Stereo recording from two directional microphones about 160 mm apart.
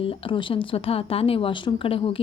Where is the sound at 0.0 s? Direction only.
35° left (ahead or behind).